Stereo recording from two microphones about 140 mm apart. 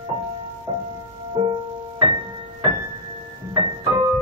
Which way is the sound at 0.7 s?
35° right (ahead or behind).